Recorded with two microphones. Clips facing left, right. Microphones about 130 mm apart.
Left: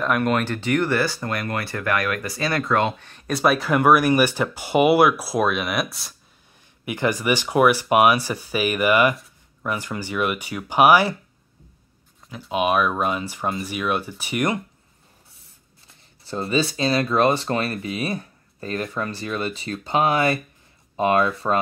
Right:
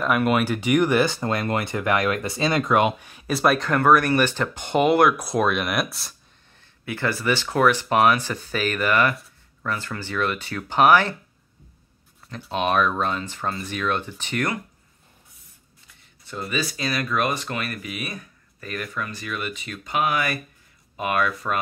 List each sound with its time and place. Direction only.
0.0 s speech: 5° right (ahead or behind)
6.8 s speech: 15° left (ahead or behind)
12.3 s speech: 10° left (ahead or behind)
15.9 s speech: 30° left (ahead or behind)